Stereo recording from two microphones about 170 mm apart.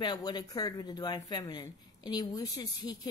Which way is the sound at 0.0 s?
25° left (ahead or behind).